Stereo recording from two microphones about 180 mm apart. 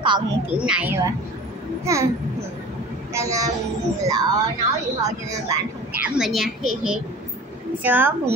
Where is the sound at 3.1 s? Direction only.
15° right (ahead or behind).